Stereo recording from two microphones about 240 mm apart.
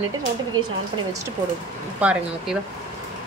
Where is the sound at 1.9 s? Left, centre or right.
Centre.